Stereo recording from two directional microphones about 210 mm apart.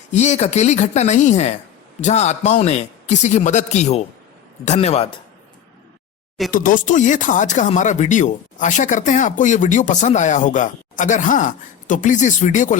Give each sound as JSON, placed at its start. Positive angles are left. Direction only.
{"t": 0.1, "sound": "speech", "side_deg": 35}
{"t": 6.5, "sound": "speech", "side_deg": 40}